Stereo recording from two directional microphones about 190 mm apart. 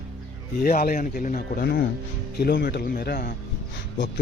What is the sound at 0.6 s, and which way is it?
A man's voice, 50° left (ahead or behind).